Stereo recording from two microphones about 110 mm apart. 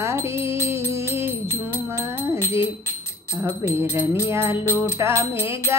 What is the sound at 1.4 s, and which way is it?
Music, 20° left (ahead or behind).